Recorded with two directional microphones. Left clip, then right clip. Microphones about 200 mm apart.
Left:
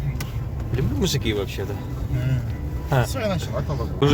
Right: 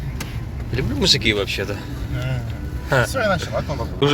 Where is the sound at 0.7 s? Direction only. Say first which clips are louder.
Right 7 dB; 15° left (ahead or behind).